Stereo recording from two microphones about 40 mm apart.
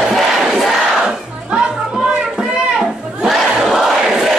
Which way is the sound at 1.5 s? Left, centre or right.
Right.